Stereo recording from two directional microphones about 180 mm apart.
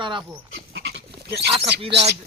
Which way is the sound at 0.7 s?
70° right (ahead or behind).